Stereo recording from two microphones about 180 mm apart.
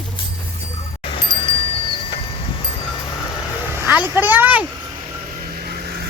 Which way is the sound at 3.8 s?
10° right (ahead or behind).